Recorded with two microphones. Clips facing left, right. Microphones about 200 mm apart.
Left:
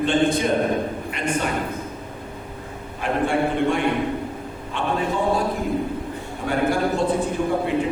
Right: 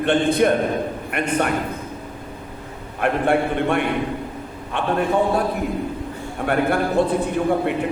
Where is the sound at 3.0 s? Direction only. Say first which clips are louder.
Right 2 dB; 60° right (ahead or behind).